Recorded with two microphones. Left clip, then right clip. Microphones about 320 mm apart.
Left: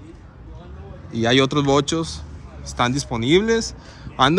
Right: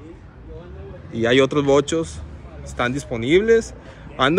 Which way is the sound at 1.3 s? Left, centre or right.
Centre.